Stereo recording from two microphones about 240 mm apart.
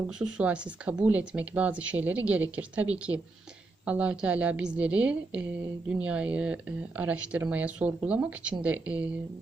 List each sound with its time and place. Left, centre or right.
0.2 s speech: centre
3.8 s speech: centre